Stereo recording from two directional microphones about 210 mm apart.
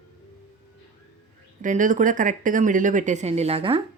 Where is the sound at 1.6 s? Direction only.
35° right (ahead or behind).